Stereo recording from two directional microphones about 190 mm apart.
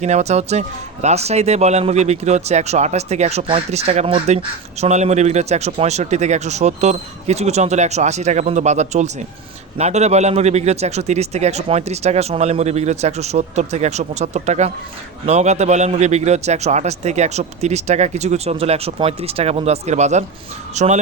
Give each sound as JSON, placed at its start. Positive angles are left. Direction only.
{"t": 0.0, "sound": "speech", "side_deg": -35}